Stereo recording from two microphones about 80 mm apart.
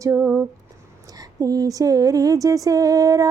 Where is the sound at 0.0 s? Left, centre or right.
Right.